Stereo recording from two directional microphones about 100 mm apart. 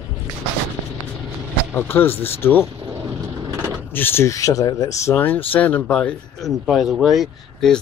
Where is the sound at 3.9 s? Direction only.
20° left (ahead or behind).